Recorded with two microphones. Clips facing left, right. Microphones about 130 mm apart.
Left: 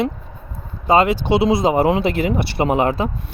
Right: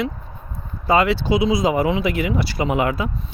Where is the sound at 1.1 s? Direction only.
65° left (ahead or behind).